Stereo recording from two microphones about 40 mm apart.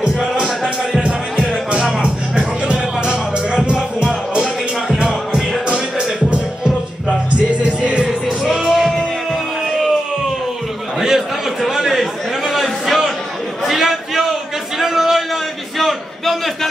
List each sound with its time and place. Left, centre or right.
2.0 s music: right
7.6 s music: right
8.5 s music: centre
8.7 s music: centre
11.0 s a sound: centre